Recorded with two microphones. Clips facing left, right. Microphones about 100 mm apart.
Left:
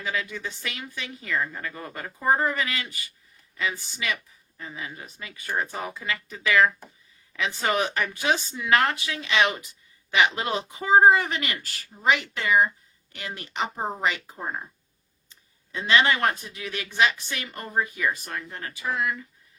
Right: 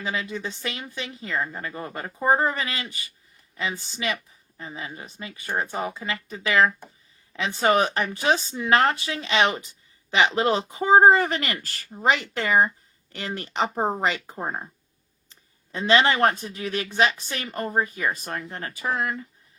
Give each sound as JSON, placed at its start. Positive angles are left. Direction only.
{"t": 0.0, "sound": "speech", "side_deg": -25}
{"t": 15.3, "sound": "a sound", "side_deg": -35}
{"t": 16.4, "sound": "speech", "side_deg": -35}
{"t": 18.5, "sound": "speech", "side_deg": -45}